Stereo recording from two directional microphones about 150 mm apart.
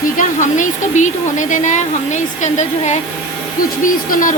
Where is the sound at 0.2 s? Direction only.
60° left (ahead or behind).